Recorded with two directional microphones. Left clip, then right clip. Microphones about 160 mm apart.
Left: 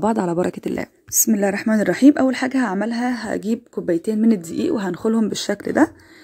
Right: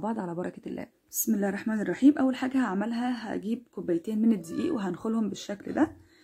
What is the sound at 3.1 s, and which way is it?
Speech, 45° left (ahead or behind).